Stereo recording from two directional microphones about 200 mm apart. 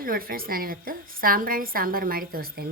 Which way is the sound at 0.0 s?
45° right (ahead or behind).